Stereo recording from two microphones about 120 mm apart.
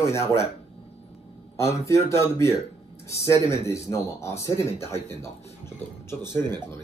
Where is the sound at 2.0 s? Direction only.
25° left (ahead or behind).